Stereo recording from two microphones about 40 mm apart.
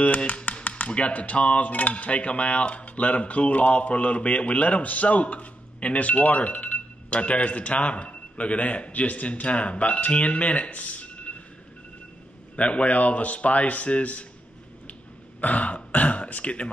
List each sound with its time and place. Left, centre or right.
0.7 s speech: left
12.5 s speech: left
15.4 s throat clearing: left